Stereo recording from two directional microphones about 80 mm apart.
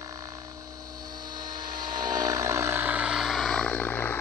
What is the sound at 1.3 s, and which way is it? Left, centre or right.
Helicopter, right.